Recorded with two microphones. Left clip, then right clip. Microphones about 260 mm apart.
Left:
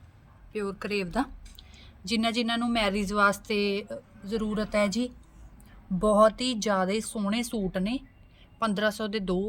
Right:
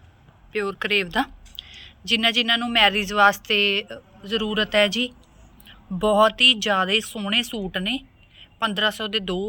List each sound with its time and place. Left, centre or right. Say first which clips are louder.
0.7 s speech: right 10 dB; centre
3.8 s a man's voice: right 5 dB; centre
4.7 s a woman's voice: right 6 dB; centre